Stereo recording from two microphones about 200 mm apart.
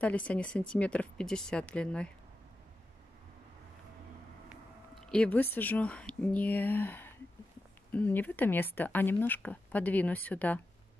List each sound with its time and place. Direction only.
0.0 s speech: 5° left (ahead or behind)
4.5 s speech: centre (ahead or behind)